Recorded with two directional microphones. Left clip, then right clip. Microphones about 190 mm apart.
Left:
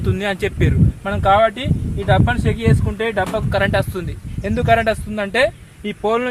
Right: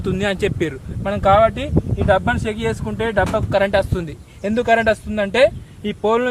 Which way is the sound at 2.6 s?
25° right (ahead or behind).